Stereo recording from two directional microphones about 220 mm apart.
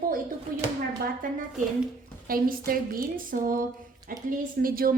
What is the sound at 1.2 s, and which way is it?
A woman's voice, 40° right (ahead or behind).